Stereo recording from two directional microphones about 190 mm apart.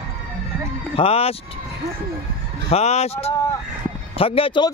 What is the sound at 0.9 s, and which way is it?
Speech, 30° left (ahead or behind).